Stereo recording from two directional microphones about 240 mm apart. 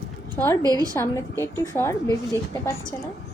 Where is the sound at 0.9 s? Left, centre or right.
Centre.